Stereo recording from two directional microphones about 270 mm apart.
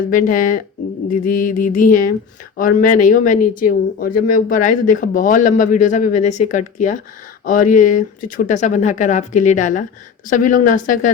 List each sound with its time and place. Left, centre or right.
0.1 s a man's voice: left